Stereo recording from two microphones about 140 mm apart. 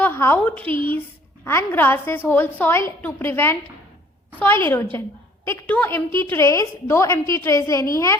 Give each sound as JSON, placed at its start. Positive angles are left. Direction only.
{"t": 0.0, "sound": "a woman's voice", "side_deg": 15}